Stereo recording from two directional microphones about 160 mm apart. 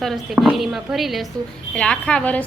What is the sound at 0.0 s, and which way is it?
A woman's voice, centre (ahead or behind).